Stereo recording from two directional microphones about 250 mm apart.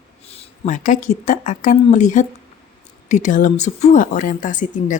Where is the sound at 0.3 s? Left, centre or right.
Left.